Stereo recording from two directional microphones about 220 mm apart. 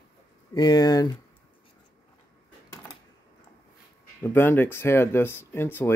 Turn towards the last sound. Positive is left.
turn(degrees=10)  # may be behind; listen again after turning